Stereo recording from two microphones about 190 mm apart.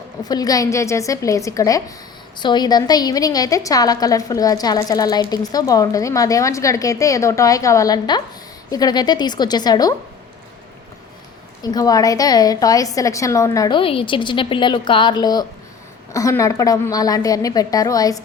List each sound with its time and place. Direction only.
0.3 s a woman's voice: 20° left (ahead or behind)
11.6 s a woman's voice: 20° left (ahead or behind)